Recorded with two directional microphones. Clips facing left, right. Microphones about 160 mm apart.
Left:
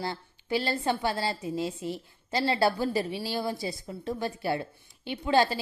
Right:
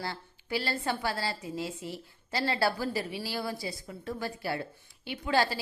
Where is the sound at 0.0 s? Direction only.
20° left (ahead or behind).